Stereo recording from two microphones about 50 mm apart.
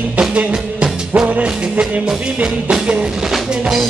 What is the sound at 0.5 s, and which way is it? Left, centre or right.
Music, right.